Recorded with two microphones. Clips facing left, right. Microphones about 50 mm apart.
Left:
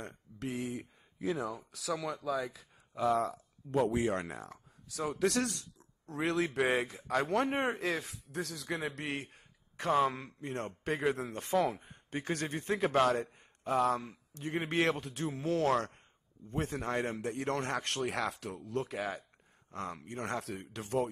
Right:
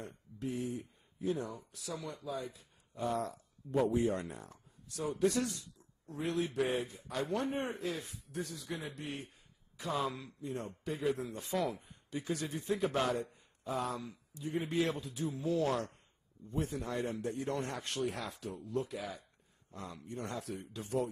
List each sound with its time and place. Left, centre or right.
0.0 s speech: left
3.7 s a man's voice: left
9.8 s speech: left
10.5 s a man's voice: left
11.2 s speech: left
11.5 s speech: centre
11.9 s a man's voice: left
13.1 s a man's voice: left
16.4 s a man's voice: left
18.7 s a man's voice: left
18.9 s a man's voice: left